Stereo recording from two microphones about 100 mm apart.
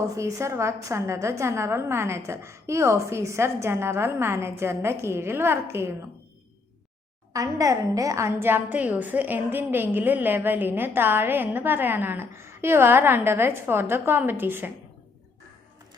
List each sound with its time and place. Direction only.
0.2 s a woman's voice: 30° right (ahead or behind)
7.3 s a woman's voice: 35° right (ahead or behind)